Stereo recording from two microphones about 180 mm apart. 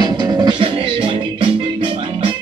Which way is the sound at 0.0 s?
25° right (ahead or behind).